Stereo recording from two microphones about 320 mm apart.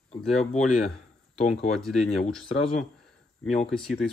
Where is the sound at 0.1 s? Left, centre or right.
Centre.